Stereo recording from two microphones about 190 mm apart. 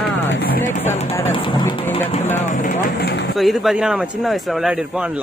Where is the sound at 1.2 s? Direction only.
25° left (ahead or behind).